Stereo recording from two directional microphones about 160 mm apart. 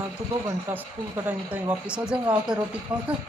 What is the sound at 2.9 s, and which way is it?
Speech, 30° right (ahead or behind).